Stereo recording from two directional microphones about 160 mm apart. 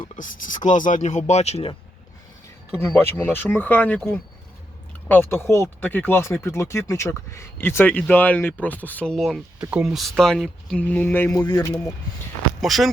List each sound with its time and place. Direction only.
0.2 s speech: 55° left (ahead or behind)
3.0 s speech: 15° left (ahead or behind)
9.6 s speech: 10° right (ahead or behind); by 11.3 s 10° left (ahead or behind)
11.3 s speech: 25° left (ahead or behind)
12.6 s speech: centre (ahead or behind)